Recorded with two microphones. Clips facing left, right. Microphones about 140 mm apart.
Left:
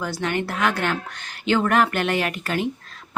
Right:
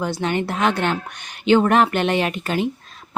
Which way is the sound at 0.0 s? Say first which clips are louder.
Right 3 dB; 20° right (ahead or behind).